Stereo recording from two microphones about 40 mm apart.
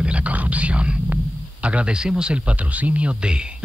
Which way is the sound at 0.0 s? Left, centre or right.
Right.